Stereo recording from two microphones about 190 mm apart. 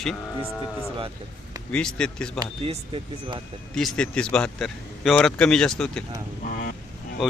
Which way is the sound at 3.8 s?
5° left (ahead or behind).